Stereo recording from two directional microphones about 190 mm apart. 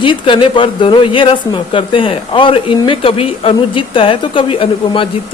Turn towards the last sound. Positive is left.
turn(degrees=25)  # may be behind; listen again after turning